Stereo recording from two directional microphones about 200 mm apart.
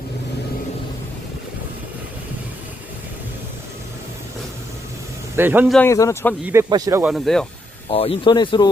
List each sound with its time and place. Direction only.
5.4 s speech: 10° right (ahead or behind)
5.7 s speech: 10° left (ahead or behind)
6.4 s speech: 15° right (ahead or behind)
7.0 s speech: centre (ahead or behind)
7.9 s speech: 30° left (ahead or behind)